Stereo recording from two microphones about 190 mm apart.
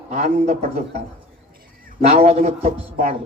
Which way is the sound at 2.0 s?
35° right (ahead or behind).